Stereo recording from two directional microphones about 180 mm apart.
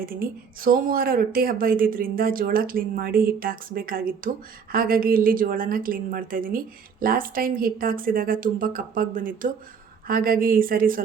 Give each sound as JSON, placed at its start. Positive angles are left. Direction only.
{"t": 0.0, "sound": "speech", "side_deg": -50}